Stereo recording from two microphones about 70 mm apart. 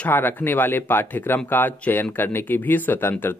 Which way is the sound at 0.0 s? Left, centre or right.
Left.